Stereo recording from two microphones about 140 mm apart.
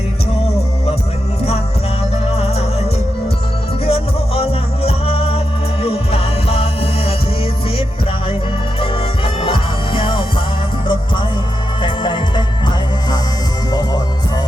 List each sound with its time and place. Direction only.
2.3 s music: 50° left (ahead or behind)
3.8 s music: 45° left (ahead or behind)
8.8 s music: 40° left (ahead or behind)
11.8 s music: 35° left (ahead or behind)